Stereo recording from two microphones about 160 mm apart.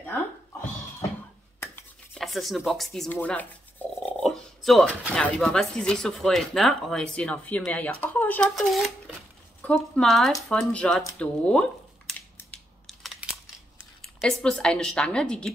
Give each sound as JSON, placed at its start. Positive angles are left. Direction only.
{"t": 2.1, "sound": "speech", "side_deg": 0}
{"t": 12.1, "sound": "crushing", "side_deg": 5}
{"t": 14.2, "sound": "speech", "side_deg": 5}